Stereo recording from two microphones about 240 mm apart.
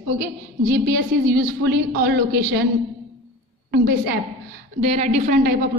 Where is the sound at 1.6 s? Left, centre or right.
Right.